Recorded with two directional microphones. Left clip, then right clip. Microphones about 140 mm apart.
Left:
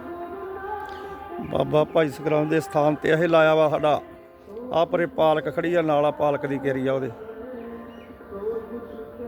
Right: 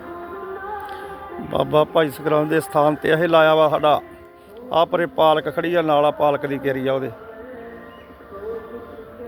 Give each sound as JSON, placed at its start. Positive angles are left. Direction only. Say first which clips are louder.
{"t": 1.5, "sound": "a man's voice", "louder": "right 4 dB", "side_deg": 5}